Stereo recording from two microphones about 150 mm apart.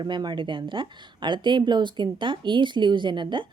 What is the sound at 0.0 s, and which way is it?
A woman's voice, 30° right (ahead or behind).